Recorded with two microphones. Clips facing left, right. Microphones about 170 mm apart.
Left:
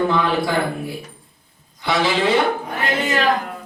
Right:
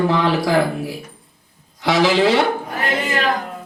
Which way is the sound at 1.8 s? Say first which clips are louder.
Right 4 dB; 75° right (ahead or behind).